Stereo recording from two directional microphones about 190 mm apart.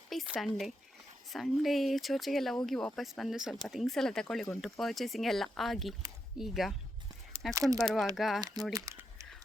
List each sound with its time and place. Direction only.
0.1 s speech: centre (ahead or behind)
7.5 s speech: 20° right (ahead or behind)
8.1 s speech: centre (ahead or behind)
8.4 s speech: 20° right (ahead or behind)
8.7 s crumpling: 15° right (ahead or behind)